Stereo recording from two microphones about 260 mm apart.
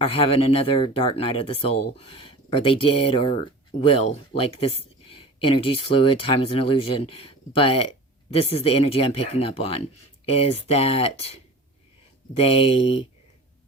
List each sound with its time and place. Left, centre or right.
0.0 s speech: left
12.4 s speech: left